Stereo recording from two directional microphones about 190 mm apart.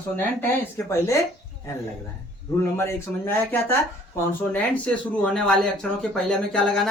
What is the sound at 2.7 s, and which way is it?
Speech, 15° left (ahead or behind).